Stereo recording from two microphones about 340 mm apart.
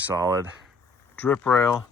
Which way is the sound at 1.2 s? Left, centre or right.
Centre.